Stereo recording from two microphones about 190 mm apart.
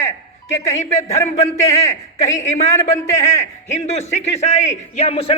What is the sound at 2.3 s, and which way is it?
A man's voice, 40° left (ahead or behind).